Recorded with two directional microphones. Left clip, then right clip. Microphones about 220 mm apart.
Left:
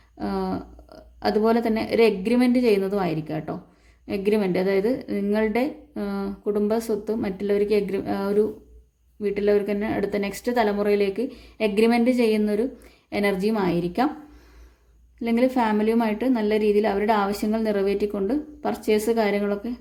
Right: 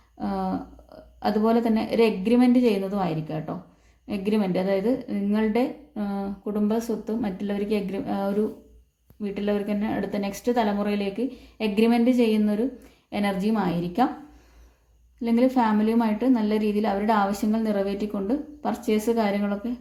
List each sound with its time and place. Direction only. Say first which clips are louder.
0.2 s a woman's voice: left 1 dB; 35° left (ahead or behind)
15.2 s a woman's voice: even; 35° left (ahead or behind)